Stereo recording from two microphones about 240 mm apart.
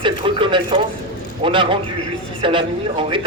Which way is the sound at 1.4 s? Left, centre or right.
Right.